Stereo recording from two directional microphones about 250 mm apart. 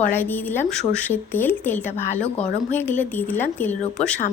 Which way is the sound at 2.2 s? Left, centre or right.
Left.